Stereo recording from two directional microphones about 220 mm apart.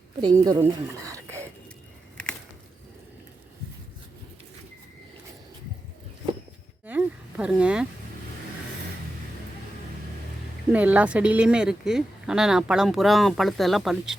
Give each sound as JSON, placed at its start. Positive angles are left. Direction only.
{"t": 0.2, "sound": "speech", "side_deg": -20}
{"t": 6.8, "sound": "a sound", "side_deg": -5}
{"t": 10.7, "sound": "speech", "side_deg": -5}